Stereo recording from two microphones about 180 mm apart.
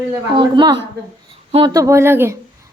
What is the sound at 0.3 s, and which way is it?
A woman's voice, 25° right (ahead or behind).